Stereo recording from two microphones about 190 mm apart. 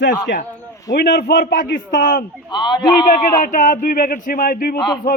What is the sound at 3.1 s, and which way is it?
Speech, 50° left (ahead or behind).